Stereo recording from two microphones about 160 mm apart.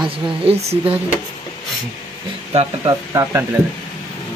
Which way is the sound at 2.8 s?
15° right (ahead or behind).